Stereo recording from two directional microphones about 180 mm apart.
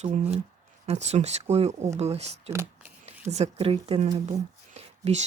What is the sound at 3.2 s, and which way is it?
Speech, 35° right (ahead or behind).